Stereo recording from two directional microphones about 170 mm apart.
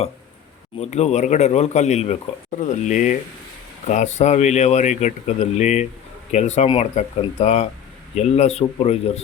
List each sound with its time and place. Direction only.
0.8 s speech: 40° left (ahead or behind)